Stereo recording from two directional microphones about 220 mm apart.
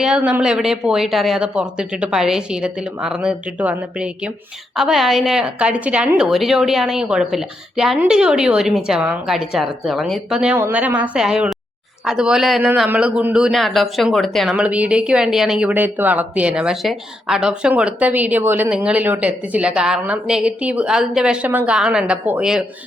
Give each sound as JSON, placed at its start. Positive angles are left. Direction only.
{"t": 0.0, "sound": "a man's voice", "side_deg": -5}